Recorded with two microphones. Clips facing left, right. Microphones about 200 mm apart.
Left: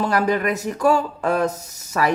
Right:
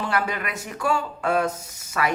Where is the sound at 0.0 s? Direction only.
40° left (ahead or behind).